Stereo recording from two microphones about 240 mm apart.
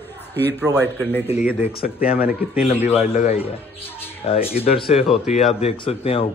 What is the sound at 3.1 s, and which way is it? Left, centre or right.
A man's voice, left.